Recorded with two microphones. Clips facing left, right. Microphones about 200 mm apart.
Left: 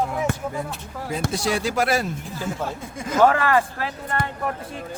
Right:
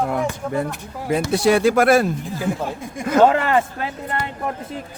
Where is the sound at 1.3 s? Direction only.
60° right (ahead or behind).